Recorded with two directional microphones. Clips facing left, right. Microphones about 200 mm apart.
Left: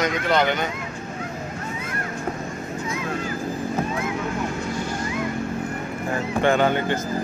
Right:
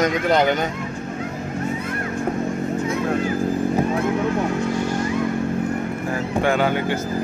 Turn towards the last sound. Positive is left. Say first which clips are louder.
# even
turn(degrees=-10)  # may be behind; listen again after turning